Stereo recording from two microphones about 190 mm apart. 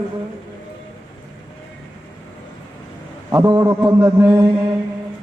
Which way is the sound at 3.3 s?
20° right (ahead or behind).